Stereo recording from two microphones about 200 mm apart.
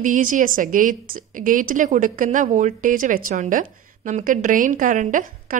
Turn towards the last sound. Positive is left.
turn(degrees=-40)  # may be behind; listen again after turning